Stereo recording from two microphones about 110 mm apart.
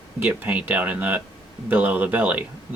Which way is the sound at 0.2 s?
15° right (ahead or behind).